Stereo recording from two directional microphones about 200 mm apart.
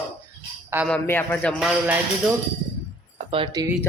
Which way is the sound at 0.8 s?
5° left (ahead or behind).